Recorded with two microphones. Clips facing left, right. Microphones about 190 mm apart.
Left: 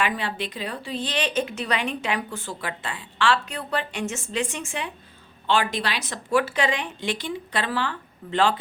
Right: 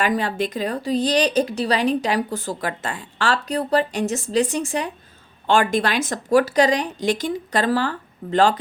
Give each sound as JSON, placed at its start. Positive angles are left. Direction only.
{"t": 0.0, "sound": "speech", "side_deg": -40}